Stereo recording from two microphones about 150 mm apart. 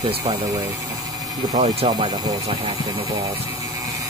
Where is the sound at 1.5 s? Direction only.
45° right (ahead or behind).